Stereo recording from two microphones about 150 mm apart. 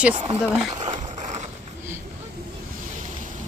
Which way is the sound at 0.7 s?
50° right (ahead or behind).